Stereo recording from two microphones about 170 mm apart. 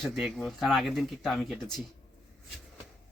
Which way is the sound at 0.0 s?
Centre (ahead or behind).